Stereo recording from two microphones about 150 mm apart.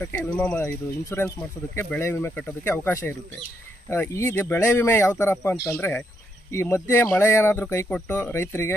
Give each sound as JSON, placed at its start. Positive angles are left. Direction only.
{"t": 0.0, "sound": "speech", "side_deg": 10}